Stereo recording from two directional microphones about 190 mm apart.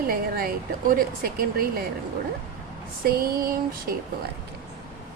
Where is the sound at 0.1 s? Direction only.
50° right (ahead or behind).